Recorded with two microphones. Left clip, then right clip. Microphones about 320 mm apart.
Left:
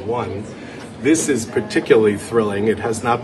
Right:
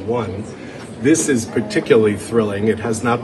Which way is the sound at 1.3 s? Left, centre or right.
Left.